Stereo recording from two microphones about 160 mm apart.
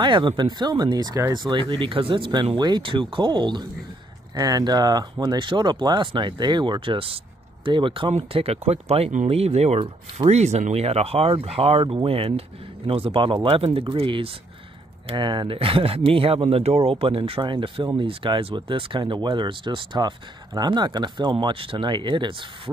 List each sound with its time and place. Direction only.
0.0 s speech: 30° right (ahead or behind)